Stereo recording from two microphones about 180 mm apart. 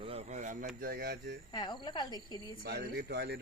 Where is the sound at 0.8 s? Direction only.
55° right (ahead or behind).